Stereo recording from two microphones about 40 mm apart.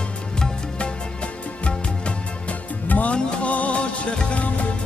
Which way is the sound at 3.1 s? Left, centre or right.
Left.